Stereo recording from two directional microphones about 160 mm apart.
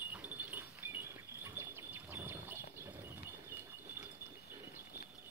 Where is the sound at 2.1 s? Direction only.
15° right (ahead or behind).